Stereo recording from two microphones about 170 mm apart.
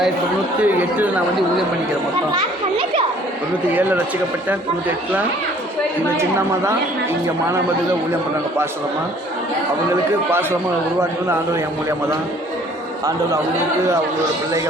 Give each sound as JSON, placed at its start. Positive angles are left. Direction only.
{"t": 0.6, "sound": "speech", "side_deg": -10}
{"t": 2.3, "sound": "speech", "side_deg": -30}
{"t": 4.4, "sound": "speech", "side_deg": -10}